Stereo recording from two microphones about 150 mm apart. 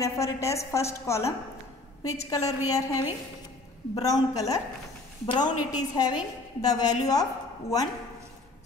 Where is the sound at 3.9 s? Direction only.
25° left (ahead or behind).